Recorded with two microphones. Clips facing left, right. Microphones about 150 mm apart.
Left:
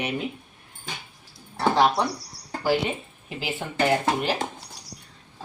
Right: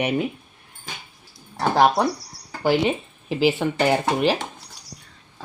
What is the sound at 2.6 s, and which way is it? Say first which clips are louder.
Speech: right 4 dB; 75° right (ahead or behind).